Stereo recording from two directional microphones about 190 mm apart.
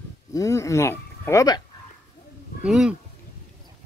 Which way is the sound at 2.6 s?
5° right (ahead or behind).